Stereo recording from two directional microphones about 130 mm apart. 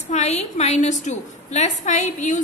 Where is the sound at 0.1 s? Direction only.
60° left (ahead or behind).